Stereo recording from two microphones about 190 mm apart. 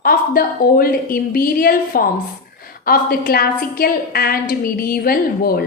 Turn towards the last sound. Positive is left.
turn(degrees=50)  # may be behind; listen again after turning